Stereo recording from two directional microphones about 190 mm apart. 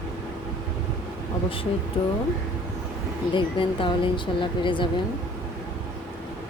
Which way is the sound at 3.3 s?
25° left (ahead or behind).